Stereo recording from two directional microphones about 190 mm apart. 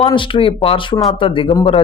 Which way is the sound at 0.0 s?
25° left (ahead or behind).